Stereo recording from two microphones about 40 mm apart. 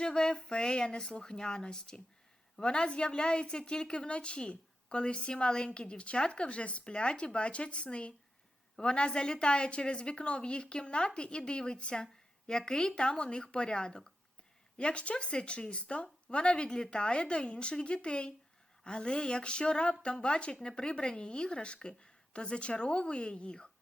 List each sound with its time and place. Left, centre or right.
0.0 s a woman's voice: left